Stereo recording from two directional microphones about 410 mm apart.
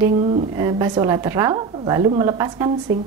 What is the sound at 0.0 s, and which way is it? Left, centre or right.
Speech, centre.